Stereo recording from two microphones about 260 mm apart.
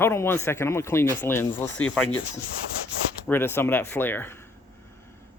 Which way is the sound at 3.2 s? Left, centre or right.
Centre.